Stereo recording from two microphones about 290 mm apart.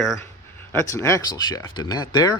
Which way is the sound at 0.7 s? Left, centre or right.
Centre.